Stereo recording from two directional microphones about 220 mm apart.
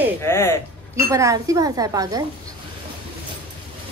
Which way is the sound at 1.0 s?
15° right (ahead or behind).